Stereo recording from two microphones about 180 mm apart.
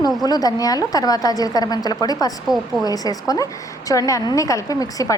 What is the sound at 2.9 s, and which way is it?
A woman's voice, 20° left (ahead or behind).